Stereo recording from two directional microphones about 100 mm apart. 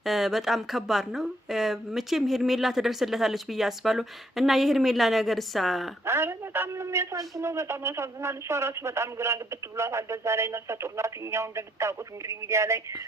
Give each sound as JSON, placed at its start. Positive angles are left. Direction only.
{"t": 0.0, "sound": "speech", "side_deg": 0}
{"t": 6.1, "sound": "a man's voice", "side_deg": -25}